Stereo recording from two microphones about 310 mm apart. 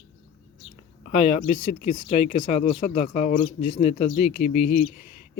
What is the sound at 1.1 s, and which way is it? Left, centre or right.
Speech, left.